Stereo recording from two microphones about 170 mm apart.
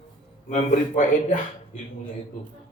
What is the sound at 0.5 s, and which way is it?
Speech, 50° left (ahead or behind).